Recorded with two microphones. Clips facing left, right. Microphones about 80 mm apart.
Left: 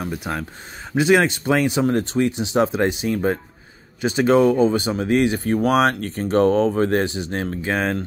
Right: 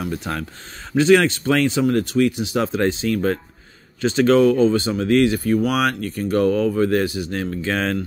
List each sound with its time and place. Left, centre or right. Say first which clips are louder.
0.1 s speech: even; centre
5.4 s speech: left 1 dB; left; by 8.0 s centre